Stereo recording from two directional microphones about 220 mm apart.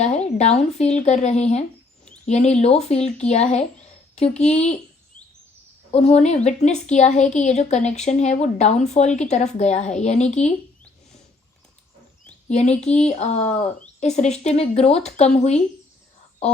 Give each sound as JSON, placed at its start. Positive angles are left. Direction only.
{"t": 0.0, "sound": "a sound", "side_deg": 30}
{"t": 0.7, "sound": "speech", "side_deg": 30}
{"t": 5.9, "sound": "speech", "side_deg": 30}
{"t": 12.5, "sound": "speech", "side_deg": 30}